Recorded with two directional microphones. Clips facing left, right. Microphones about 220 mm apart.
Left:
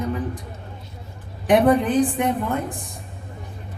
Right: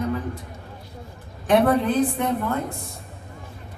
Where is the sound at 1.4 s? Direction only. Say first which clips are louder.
Left 2 dB; 15° left (ahead or behind).